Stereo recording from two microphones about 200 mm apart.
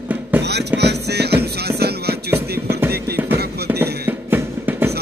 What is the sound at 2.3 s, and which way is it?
Music, 10° right (ahead or behind).